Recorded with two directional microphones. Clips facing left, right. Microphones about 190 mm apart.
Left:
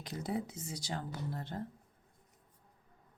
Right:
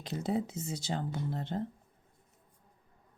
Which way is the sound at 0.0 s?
25° right (ahead or behind).